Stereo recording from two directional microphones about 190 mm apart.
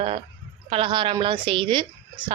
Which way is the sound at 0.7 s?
25° right (ahead or behind).